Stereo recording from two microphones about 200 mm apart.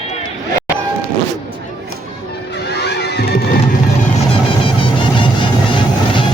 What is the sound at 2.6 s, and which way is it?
Music, 55° left (ahead or behind).